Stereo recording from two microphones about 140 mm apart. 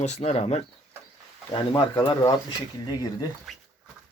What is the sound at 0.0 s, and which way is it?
Speech, 50° left (ahead or behind).